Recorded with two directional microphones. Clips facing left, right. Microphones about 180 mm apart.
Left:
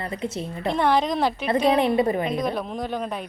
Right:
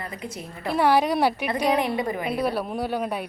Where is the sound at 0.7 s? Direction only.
10° right (ahead or behind).